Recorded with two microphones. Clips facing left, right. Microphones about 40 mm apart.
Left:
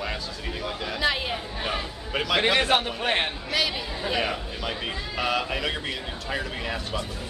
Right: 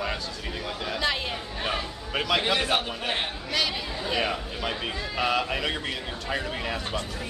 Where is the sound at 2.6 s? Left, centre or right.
Left.